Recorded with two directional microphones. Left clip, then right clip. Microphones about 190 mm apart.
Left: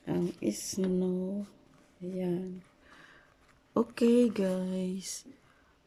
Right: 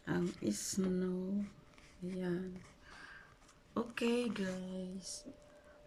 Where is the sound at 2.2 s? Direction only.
15° left (ahead or behind).